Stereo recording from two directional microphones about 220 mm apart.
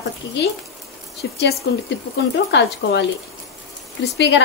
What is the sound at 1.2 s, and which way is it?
Speech, 55° left (ahead or behind).